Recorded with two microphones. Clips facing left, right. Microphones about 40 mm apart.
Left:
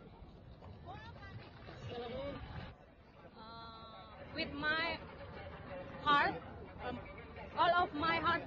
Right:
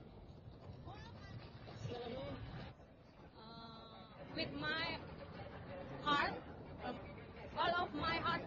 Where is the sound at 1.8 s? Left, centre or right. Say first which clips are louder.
Left 3 dB; left.